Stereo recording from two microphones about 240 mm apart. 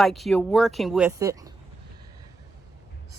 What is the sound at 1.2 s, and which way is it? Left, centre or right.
Speech, centre.